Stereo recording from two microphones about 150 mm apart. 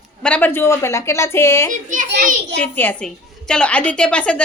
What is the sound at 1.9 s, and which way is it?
Speech, 60° right (ahead or behind).